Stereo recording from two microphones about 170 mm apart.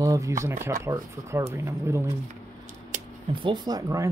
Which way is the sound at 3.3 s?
25° right (ahead or behind).